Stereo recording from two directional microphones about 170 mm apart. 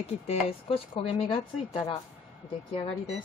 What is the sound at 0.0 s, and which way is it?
Speech, 35° left (ahead or behind).